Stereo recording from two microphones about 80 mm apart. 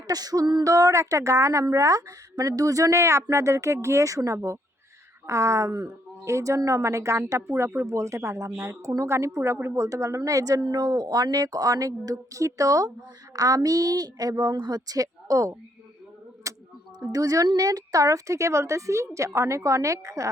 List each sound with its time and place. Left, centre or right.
0.1 s a woman's voice: right
10.6 s a woman's voice: right
16.4 s a sound: right
17.1 s a woman's voice: right